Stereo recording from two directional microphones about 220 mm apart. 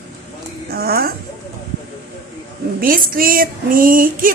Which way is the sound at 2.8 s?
40° right (ahead or behind).